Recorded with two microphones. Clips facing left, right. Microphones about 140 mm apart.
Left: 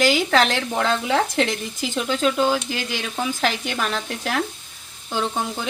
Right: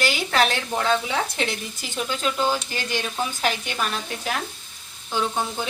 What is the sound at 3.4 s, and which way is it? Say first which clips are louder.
Speech: left 1 dB; 85° left.